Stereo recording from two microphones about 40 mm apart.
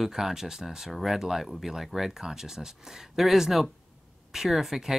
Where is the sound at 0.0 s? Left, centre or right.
Centre.